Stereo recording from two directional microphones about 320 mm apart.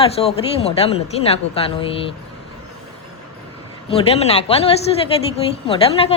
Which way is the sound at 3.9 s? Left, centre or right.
Centre.